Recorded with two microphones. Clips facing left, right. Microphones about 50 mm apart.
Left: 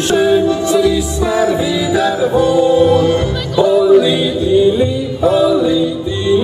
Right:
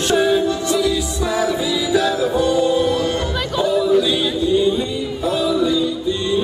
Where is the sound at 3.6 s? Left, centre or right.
Centre.